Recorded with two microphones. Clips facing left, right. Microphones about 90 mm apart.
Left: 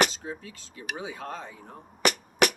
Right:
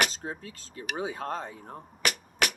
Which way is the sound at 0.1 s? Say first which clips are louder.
Even; 40° right (ahead or behind).